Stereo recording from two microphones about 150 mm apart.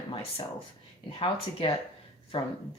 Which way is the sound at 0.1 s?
40° left (ahead or behind).